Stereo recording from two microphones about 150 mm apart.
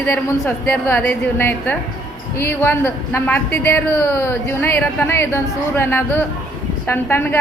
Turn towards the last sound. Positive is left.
turn(degrees=15)  # may be behind; listen again after turning